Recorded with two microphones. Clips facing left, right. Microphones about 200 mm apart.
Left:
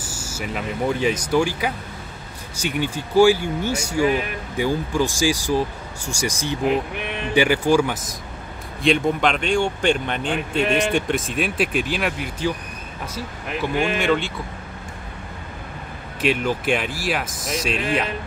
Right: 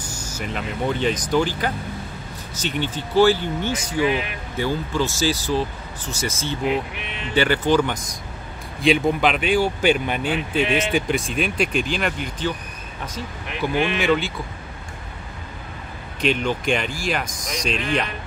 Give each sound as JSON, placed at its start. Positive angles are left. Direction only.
{"t": 0.0, "sound": "speech", "side_deg": 10}
{"t": 4.0, "sound": "speech", "side_deg": 45}
{"t": 4.6, "sound": "speech", "side_deg": 15}
{"t": 8.8, "sound": "speech", "side_deg": -5}
{"t": 13.6, "sound": "speech", "side_deg": 0}
{"t": 16.2, "sound": "speech", "side_deg": 5}